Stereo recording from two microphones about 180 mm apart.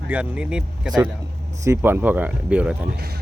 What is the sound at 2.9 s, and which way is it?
Speech, 65° right (ahead or behind).